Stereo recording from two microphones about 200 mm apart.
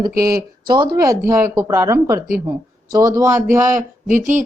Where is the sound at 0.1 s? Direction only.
50° right (ahead or behind).